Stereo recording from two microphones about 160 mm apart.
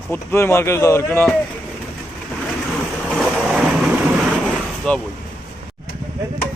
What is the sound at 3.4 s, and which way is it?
Vehicle, 5° right (ahead or behind).